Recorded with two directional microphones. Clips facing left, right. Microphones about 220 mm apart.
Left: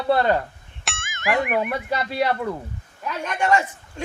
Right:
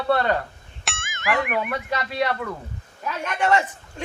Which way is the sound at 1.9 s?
30° left (ahead or behind).